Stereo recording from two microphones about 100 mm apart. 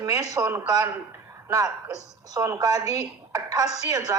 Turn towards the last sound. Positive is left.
turn(degrees=-35)  # may be behind; listen again after turning